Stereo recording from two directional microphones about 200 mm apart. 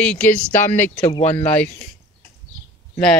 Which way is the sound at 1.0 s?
30° left (ahead or behind).